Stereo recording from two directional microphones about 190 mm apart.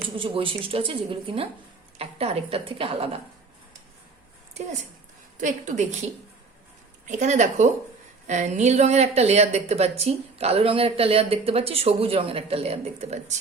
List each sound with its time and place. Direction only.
0.2 s a woman's voice: 30° right (ahead or behind)
5.4 s a woman's voice: 40° right (ahead or behind)
7.1 s a woman's voice: 40° right (ahead or behind)